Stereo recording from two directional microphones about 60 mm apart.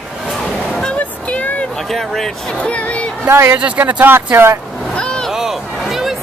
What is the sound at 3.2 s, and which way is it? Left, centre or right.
Speech, right.